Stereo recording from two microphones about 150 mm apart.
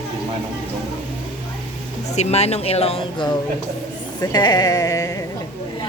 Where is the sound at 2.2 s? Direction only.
45° left (ahead or behind).